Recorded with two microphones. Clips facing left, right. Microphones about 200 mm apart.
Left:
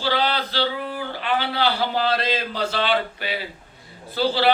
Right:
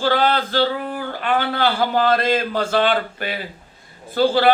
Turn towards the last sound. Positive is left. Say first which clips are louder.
# right 4 dB
turn(degrees=-50)  # may be behind; listen again after turning